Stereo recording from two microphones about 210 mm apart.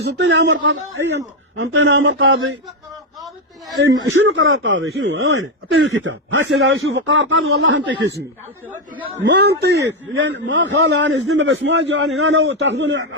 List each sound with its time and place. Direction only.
0.0 s a man's voice: 55° right (ahead or behind)
3.8 s speech: 65° right (ahead or behind); by 7.8 s 85° right
9.2 s a man's voice: 55° right (ahead or behind)